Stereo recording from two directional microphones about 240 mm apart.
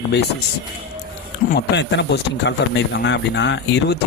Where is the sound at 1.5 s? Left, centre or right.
Left.